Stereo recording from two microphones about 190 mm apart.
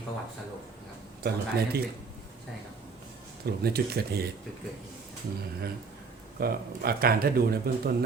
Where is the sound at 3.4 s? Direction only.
55° right (ahead or behind).